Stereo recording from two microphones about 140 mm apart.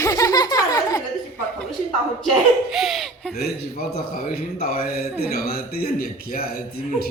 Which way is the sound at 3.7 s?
90° left.